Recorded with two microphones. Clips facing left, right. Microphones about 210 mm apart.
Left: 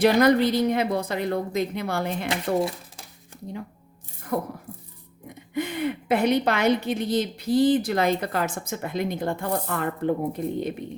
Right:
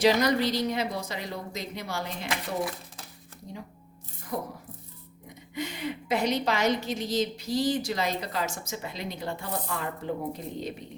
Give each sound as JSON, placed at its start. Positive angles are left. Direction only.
{"t": 0.0, "sound": "a woman's voice", "side_deg": 55}
{"t": 4.3, "sound": "a woman's voice", "side_deg": 55}
{"t": 5.5, "sound": "a woman's voice", "side_deg": 55}